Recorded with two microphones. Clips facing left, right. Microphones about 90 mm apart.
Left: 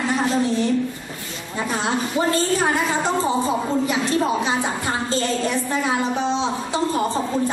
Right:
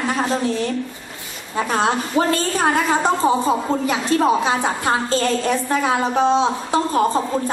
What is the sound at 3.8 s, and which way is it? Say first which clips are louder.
A woman's voice: right 3 dB; 50° right (ahead or behind).